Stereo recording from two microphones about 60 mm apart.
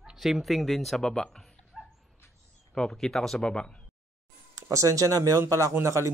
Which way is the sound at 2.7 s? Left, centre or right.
Centre.